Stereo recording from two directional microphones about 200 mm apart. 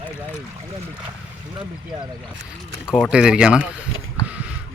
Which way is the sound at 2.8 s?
Centre (ahead or behind).